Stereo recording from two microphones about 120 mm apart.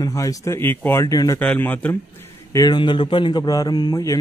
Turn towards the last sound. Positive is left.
turn(degrees=30)  # may be behind; listen again after turning